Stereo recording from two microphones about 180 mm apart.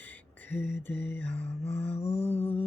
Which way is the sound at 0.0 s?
10° left (ahead or behind).